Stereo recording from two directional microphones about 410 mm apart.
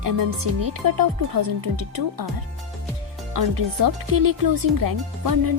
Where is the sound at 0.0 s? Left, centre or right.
Right.